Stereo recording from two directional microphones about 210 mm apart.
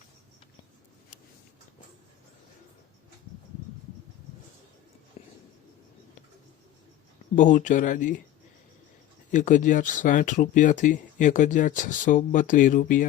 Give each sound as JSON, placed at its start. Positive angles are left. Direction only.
{"t": 7.3, "sound": "speech", "side_deg": 35}
{"t": 9.3, "sound": "speech", "side_deg": 40}